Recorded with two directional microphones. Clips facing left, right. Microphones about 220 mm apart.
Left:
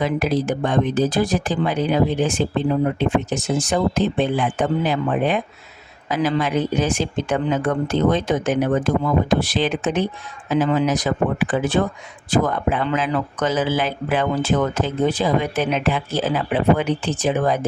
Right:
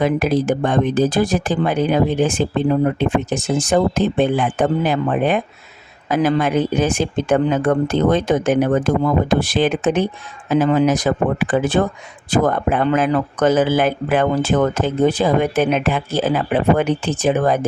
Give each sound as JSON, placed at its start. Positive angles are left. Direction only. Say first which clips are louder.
{"t": 0.0, "sound": "speech", "louder": "right 4 dB", "side_deg": -50}
{"t": 3.7, "sound": "speech", "louder": "right 4 dB", "side_deg": -50}